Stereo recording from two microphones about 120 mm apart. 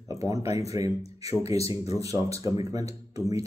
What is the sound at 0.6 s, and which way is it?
Speech, 25° right (ahead or behind).